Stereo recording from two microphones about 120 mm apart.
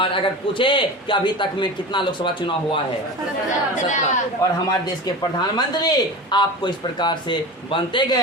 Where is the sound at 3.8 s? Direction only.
90° left.